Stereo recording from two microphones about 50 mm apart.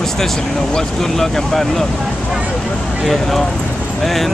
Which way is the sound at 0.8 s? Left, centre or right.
Centre.